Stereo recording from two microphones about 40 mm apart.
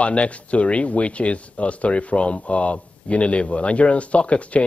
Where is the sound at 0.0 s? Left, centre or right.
Left.